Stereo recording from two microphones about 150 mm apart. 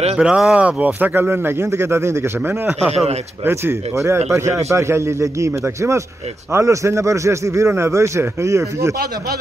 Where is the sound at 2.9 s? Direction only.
45° right (ahead or behind).